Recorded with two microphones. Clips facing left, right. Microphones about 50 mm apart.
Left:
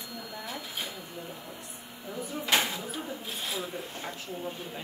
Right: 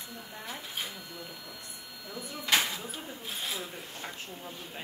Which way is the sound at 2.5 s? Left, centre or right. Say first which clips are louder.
Left 1 dB; centre.